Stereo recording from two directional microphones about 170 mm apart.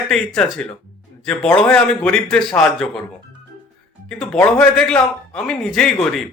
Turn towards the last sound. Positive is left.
turn(degrees=5)  # may be behind; listen again after turning